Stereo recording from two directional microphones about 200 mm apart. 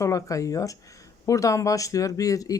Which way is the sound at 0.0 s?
15° left (ahead or behind).